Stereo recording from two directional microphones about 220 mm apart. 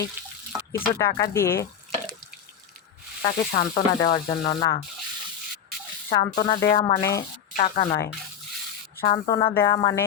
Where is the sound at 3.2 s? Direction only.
30° left (ahead or behind).